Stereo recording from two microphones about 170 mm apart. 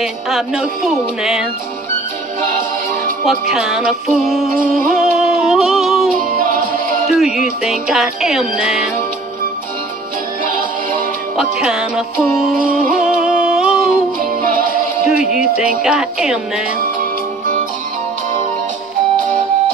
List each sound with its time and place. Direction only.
0.0 s music: centre (ahead or behind)
3.3 s music: centre (ahead or behind)
6.1 s music: 50° right (ahead or behind)
7.1 s music: centre (ahead or behind)
11.3 s music: 5° right (ahead or behind)
15.3 s music: 5° right (ahead or behind)
16.8 s music: 50° right (ahead or behind)